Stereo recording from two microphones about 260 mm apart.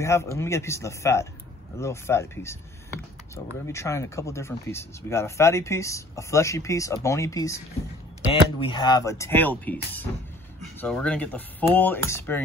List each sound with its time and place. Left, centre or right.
0.0 s speech: centre
3.6 s speech: centre